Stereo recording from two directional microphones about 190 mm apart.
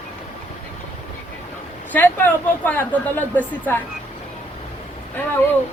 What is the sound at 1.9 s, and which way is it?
Speech, 10° left (ahead or behind).